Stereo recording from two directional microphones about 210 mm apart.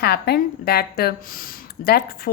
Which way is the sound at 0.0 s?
50° left (ahead or behind).